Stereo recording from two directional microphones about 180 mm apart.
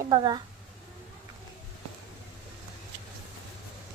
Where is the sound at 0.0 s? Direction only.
25° right (ahead or behind).